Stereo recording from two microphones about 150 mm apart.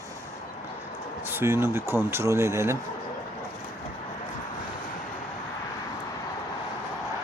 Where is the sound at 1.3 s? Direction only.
15° right (ahead or behind).